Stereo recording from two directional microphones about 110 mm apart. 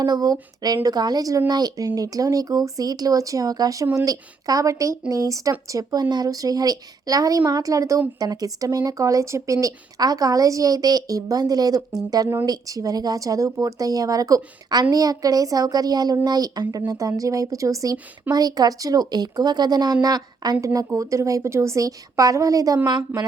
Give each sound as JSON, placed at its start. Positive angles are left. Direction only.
{"t": 0.0, "sound": "a woman's voice", "side_deg": -35}
{"t": 22.9, "sound": "a woman's voice", "side_deg": -45}